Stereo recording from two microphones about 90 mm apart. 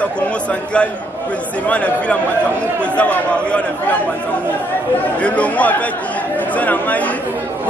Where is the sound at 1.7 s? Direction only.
15° left (ahead or behind).